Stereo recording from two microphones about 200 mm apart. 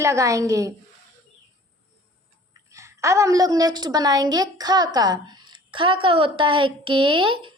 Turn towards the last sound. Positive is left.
turn(degrees=-25)  # may be behind; listen again after turning